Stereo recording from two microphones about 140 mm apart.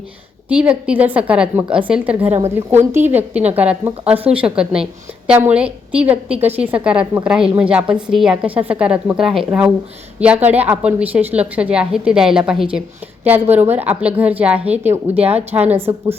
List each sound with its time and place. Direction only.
0.4 s a woman's voice: 10° right (ahead or behind)
2.2 s a woman's voice: 50° right (ahead or behind)
2.6 s a woman's voice: 15° right (ahead or behind)
15.1 s a woman's voice: 50° right (ahead or behind)
15.7 s a woman's voice: 15° right (ahead or behind)